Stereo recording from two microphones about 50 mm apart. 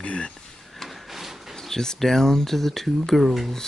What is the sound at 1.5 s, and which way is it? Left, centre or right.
Speech, centre.